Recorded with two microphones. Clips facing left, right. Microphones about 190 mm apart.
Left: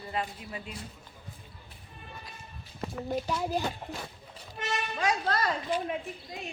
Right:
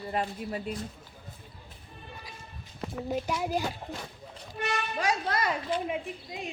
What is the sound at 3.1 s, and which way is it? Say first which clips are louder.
Speech: right 1 dB; 10° right (ahead or behind).